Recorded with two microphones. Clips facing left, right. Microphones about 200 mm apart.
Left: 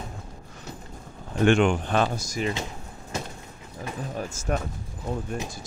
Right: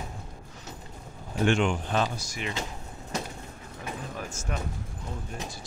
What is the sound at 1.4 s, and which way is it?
Speech, 60° left (ahead or behind).